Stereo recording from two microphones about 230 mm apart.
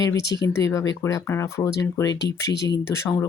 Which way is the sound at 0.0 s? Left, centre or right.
Centre.